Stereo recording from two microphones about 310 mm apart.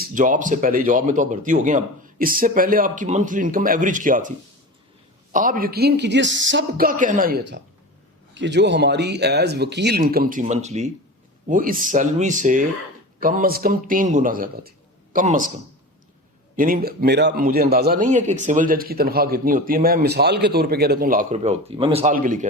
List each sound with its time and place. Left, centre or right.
0.0 s a man's voice: right
5.3 s a man's voice: right
16.6 s a man's voice: right